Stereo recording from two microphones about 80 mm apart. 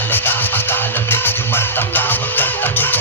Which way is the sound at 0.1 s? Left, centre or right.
Left.